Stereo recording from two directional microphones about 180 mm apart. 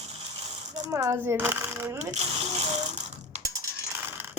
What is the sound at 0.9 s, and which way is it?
A child's voice, 15° right (ahead or behind).